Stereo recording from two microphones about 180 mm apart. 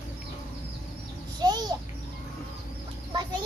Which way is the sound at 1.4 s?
20° right (ahead or behind).